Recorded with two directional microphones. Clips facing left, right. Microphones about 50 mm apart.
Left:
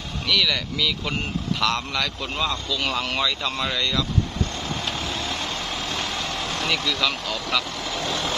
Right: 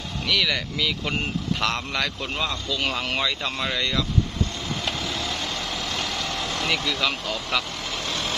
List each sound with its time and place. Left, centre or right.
0.3 s speech: centre
2.3 s speech: centre
5.1 s vehicle: left
6.9 s speech: centre